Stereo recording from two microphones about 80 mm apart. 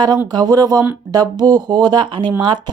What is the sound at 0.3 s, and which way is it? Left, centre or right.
A woman's voice, right.